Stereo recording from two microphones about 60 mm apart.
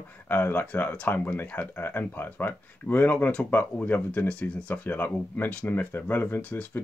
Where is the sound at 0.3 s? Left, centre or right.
Left.